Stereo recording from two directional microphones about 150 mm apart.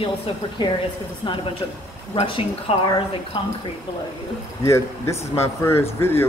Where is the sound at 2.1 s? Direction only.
35° left (ahead or behind).